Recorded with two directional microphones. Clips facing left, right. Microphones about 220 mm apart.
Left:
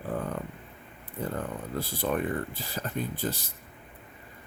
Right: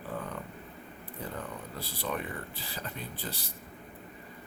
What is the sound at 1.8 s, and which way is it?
Speech, 50° left (ahead or behind).